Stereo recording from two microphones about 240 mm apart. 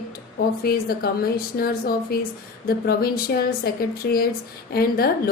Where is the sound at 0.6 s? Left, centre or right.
Left.